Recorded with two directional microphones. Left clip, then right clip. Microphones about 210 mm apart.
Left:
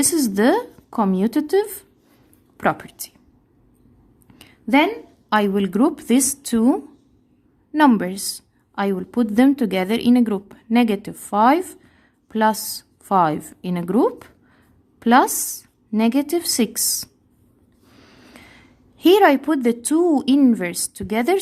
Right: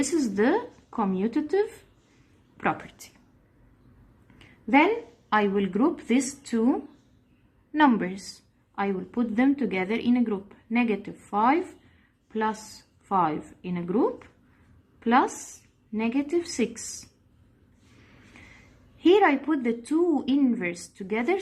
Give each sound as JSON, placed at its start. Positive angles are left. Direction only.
{"t": 0.0, "sound": "a woman's voice", "side_deg": 65}
{"t": 2.6, "sound": "a woman's voice", "side_deg": 60}
{"t": 5.3, "sound": "a woman's voice", "side_deg": 60}
{"t": 7.7, "sound": "a woman's voice", "side_deg": 55}
{"t": 18.9, "sound": "a woman's voice", "side_deg": 65}